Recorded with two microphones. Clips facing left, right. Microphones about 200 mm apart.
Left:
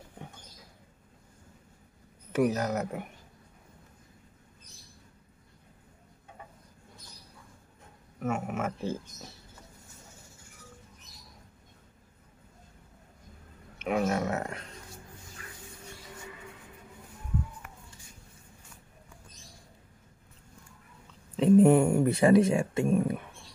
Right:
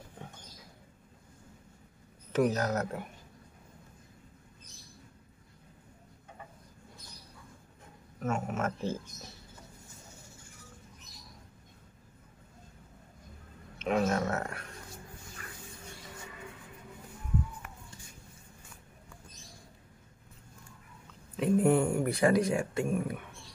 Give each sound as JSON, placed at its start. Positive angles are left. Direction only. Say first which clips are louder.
{"t": 2.3, "sound": "speech", "louder": "left 1 dB", "side_deg": 10}
{"t": 8.2, "sound": "speech", "louder": "left 1 dB", "side_deg": 15}
{"t": 13.8, "sound": "speech", "louder": "left 1 dB", "side_deg": 10}
{"t": 21.4, "sound": "speech", "louder": "left 6 dB", "side_deg": 20}